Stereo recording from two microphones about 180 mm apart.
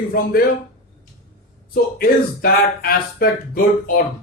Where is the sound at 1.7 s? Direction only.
55° left (ahead or behind).